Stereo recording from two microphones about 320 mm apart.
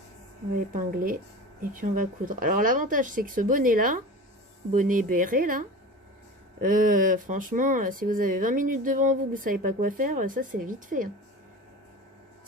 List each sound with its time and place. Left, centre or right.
0.7 s speech: right